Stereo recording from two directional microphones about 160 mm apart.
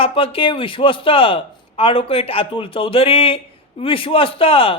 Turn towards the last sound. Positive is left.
turn(degrees=35)  # may be behind; listen again after turning